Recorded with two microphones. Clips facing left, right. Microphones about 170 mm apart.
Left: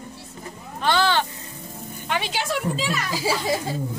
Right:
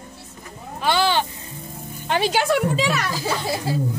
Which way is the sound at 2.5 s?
70° right (ahead or behind).